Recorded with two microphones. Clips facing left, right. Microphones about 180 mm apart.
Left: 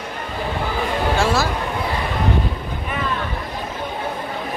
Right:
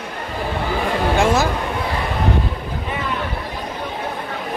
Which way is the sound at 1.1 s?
20° right (ahead or behind).